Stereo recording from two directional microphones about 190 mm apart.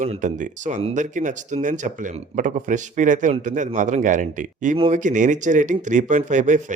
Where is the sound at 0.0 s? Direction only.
40° right (ahead or behind).